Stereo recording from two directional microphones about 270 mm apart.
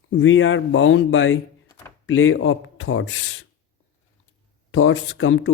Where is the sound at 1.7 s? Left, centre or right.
Centre.